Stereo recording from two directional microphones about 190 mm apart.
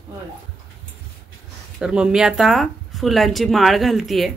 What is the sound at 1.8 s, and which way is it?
Speech, 5° right (ahead or behind).